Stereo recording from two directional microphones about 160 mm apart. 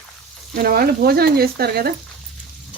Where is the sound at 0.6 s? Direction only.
70° right (ahead or behind).